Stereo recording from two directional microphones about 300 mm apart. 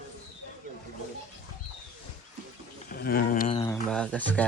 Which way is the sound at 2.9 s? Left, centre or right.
Left.